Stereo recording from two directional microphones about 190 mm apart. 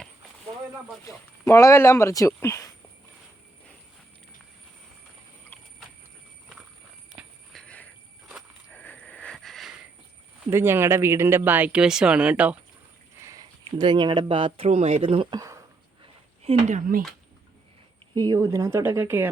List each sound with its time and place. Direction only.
1.0 s speech: 15° left (ahead or behind)
7.2 s walk: 5° left (ahead or behind)
8.3 s a sound: centre (ahead or behind)
10.5 s speech: 15° right (ahead or behind)
16.4 s speech: 35° right (ahead or behind)
18.1 s speech: 20° right (ahead or behind)